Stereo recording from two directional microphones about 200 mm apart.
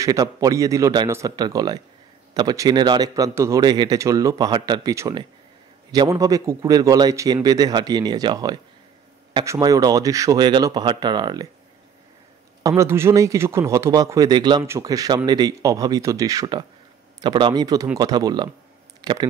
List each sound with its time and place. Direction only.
0.0 s a man's voice: 15° right (ahead or behind)
12.6 s a man's voice: 15° right (ahead or behind)
18.9 s a sound: 20° right (ahead or behind)